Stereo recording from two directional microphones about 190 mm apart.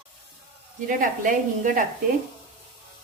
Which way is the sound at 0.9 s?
45° right (ahead or behind).